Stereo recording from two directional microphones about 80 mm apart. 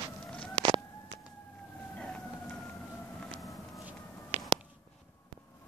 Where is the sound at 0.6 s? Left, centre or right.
Right.